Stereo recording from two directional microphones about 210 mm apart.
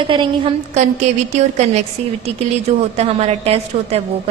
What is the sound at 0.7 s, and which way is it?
A woman's voice, 35° right (ahead or behind).